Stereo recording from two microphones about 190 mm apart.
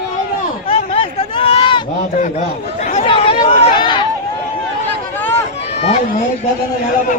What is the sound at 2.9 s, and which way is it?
Chatter, 30° left (ahead or behind).